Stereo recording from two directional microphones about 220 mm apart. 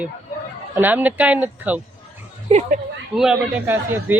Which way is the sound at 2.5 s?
35° right (ahead or behind).